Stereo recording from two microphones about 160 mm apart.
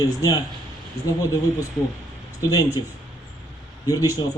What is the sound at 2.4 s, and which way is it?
Speech, 20° left (ahead or behind).